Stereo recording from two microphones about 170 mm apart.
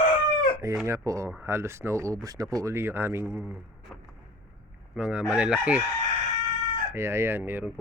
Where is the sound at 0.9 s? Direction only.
20° right (ahead or behind).